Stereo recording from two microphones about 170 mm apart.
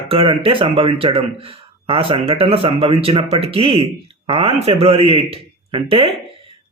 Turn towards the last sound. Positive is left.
turn(degrees=-30)  # may be behind; listen again after turning